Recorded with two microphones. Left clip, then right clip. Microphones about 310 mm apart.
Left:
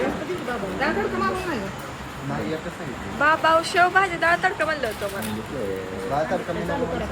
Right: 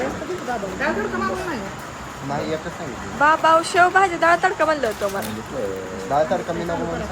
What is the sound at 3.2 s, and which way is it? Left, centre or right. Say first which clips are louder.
Speech: right 3 dB; centre.